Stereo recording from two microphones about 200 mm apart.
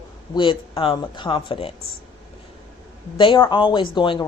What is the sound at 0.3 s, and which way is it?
Speech, 25° left (ahead or behind).